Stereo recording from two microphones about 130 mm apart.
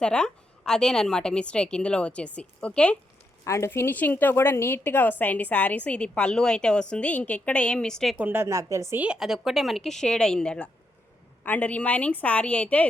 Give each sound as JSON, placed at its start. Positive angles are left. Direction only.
{"t": 0.0, "sound": "a woman's voice", "side_deg": 5}
{"t": 3.4, "sound": "a woman's voice", "side_deg": 25}
{"t": 8.2, "sound": "a woman's voice", "side_deg": -15}
{"t": 9.0, "sound": "a woman's voice", "side_deg": -5}